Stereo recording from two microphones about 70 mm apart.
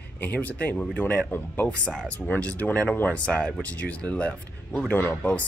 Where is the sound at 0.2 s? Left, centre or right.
Left.